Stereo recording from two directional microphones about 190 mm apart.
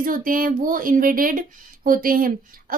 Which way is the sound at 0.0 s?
45° right (ahead or behind).